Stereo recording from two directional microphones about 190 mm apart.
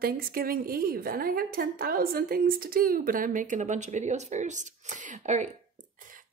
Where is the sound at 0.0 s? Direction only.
50° right (ahead or behind).